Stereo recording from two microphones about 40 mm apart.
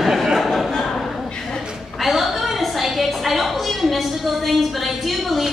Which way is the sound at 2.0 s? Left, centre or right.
Centre.